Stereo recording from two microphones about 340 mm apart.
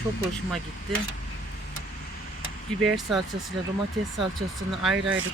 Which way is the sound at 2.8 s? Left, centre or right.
Centre.